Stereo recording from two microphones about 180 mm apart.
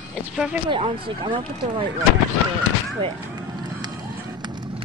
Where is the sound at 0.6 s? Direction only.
25° right (ahead or behind).